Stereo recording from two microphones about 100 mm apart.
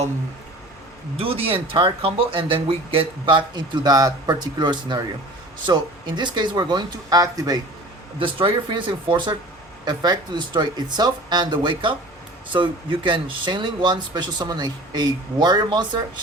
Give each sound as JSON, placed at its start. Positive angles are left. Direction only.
{"t": 1.1, "sound": "speech", "side_deg": -70}
{"t": 8.2, "sound": "speech", "side_deg": -60}